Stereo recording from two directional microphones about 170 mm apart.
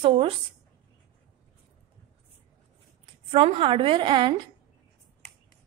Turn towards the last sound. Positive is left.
turn(degrees=-25)  # may be behind; listen again after turning